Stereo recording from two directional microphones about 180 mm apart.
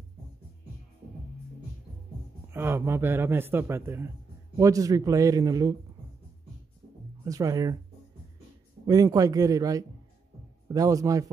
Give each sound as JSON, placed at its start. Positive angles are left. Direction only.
{"t": 2.5, "sound": "a man's voice", "side_deg": -15}
{"t": 7.2, "sound": "a man's voice", "side_deg": -20}
{"t": 8.8, "sound": "a man's voice", "side_deg": -20}